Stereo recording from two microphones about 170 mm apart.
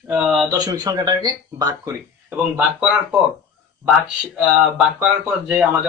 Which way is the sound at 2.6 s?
5° right (ahead or behind).